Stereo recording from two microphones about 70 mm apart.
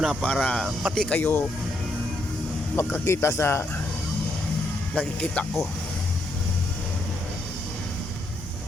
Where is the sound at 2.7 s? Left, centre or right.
Left.